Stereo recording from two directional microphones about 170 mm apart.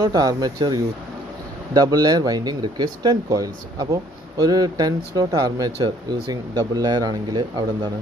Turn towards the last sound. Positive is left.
turn(degrees=-25)  # may be behind; listen again after turning